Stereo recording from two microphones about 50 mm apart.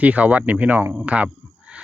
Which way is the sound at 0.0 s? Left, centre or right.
Right.